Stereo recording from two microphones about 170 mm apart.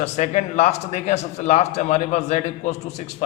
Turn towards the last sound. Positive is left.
turn(degrees=40)  # may be behind; listen again after turning